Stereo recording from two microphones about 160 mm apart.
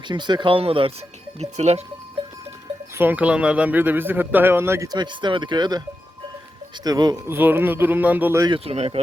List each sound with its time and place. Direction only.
0.1 s speech: 30° right (ahead or behind)
3.0 s speech: 10° right (ahead or behind); by 5.8 s 25° right (ahead or behind)
6.8 s speech: 25° right (ahead or behind)
7.3 s speech: 10° right (ahead or behind)
8.4 s speech: 35° right (ahead or behind)